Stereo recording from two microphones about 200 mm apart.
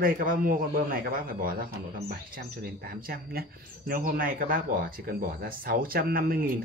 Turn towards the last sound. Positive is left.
turn(degrees=-45)  # may be behind; listen again after turning